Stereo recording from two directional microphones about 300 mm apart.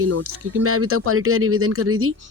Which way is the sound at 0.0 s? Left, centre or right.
Right.